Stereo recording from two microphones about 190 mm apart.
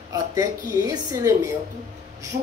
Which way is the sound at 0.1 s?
20° right (ahead or behind).